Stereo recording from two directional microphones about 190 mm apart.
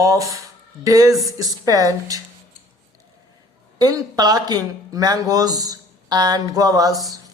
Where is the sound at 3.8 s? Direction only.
20° right (ahead or behind).